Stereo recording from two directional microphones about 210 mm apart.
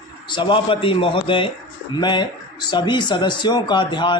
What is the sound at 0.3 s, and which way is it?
Speech, 20° left (ahead or behind).